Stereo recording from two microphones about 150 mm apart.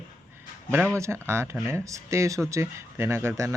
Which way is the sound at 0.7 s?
10° right (ahead or behind).